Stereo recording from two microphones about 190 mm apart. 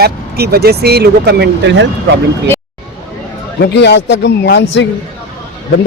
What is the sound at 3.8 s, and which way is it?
A man's voice, 65° left (ahead or behind).